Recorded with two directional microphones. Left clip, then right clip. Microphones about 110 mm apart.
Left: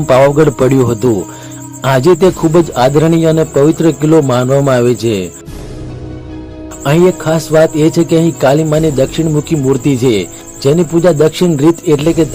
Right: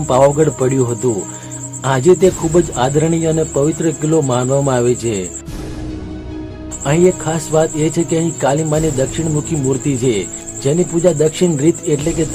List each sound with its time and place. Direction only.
0.1 s a man's voice: 50° left (ahead or behind)
6.8 s speech: 40° left (ahead or behind)